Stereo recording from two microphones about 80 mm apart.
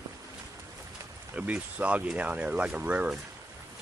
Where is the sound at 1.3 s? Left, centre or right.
Centre.